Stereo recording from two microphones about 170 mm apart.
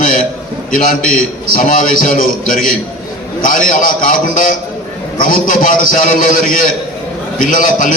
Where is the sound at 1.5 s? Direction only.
50° left (ahead or behind).